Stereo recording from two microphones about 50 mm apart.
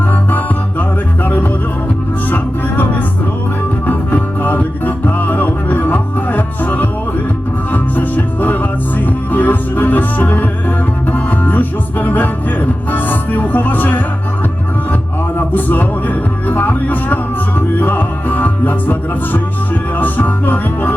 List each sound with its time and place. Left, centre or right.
0.3 s music: left
3.8 s music: left
15.4 s music: left